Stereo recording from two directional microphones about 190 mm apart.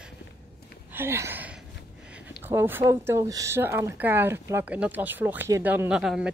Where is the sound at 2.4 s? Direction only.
10° right (ahead or behind).